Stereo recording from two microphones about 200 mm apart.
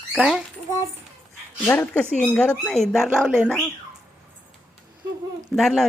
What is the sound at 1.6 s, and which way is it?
Speech, 10° left (ahead or behind).